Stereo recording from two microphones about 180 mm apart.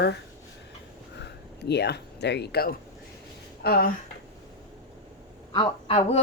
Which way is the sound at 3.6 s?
60° left (ahead or behind).